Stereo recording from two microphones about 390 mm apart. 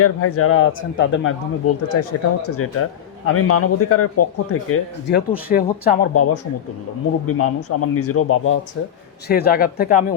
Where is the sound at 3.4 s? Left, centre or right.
Left.